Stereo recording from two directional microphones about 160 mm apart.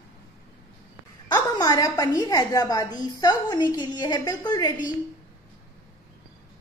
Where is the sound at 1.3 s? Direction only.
25° left (ahead or behind).